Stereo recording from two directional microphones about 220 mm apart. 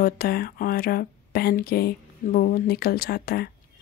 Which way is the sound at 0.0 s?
45° left (ahead or behind).